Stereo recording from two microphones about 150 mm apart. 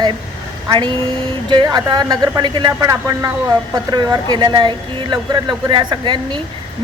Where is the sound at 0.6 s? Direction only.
30° right (ahead or behind).